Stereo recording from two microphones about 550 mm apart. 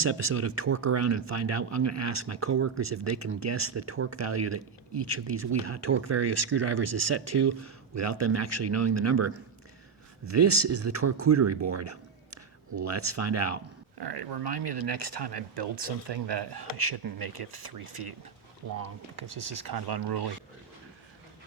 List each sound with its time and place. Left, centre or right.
0.0 s speech: right
14.0 s speech: right
19.5 s speech: right